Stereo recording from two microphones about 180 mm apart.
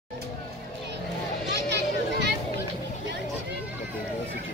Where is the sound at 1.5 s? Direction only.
70° right (ahead or behind).